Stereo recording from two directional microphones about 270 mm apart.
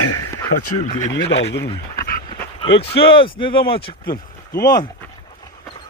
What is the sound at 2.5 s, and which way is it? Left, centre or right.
Speech, left.